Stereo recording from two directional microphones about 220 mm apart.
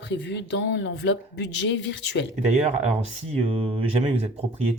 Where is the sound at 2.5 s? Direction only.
30° right (ahead or behind).